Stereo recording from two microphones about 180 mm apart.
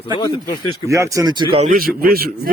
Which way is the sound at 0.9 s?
15° right (ahead or behind).